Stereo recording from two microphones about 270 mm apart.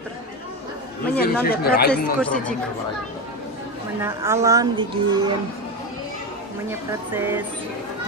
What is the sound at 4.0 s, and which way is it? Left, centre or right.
Speech, centre.